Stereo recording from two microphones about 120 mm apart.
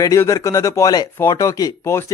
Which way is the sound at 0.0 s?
25° left (ahead or behind).